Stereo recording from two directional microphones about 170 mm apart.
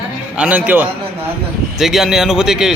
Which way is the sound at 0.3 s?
10° right (ahead or behind).